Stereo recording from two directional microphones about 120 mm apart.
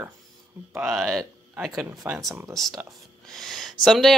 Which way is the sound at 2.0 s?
15° right (ahead or behind).